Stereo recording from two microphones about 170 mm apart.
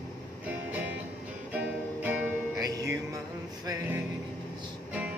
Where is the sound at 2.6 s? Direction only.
20° right (ahead or behind).